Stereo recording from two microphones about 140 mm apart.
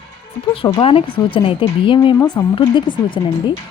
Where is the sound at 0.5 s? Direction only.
40° left (ahead or behind).